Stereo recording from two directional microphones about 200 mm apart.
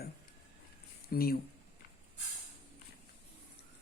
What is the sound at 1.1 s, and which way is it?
Speech, 50° left (ahead or behind).